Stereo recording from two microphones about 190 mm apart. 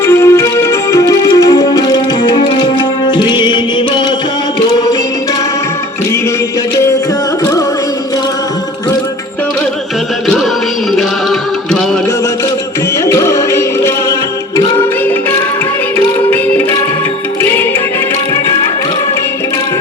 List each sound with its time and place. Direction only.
0.0 s music: 15° left (ahead or behind)
2.4 s tabla: 25° left (ahead or behind)
13.1 s music: 15° left (ahead or behind)